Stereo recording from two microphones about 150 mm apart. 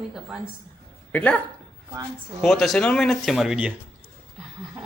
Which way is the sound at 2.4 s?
Centre (ahead or behind).